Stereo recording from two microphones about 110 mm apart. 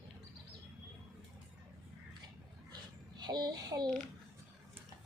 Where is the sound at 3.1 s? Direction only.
40° right (ahead or behind).